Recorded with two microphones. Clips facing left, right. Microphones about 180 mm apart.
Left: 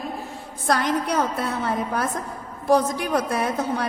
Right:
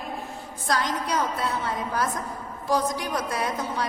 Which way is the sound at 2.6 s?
60° left (ahead or behind).